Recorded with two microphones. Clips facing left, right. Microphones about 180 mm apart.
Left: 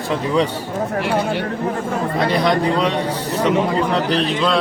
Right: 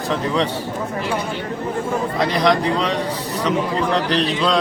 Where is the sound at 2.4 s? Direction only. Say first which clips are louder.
Left 1 dB; 5° left (ahead or behind).